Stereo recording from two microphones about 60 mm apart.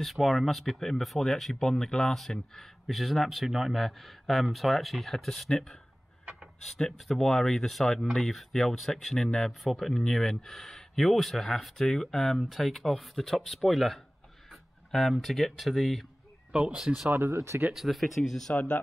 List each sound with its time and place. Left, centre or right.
0.0 s speech: centre
17.2 s speech: right
17.7 s speech: centre
18.5 s speech: left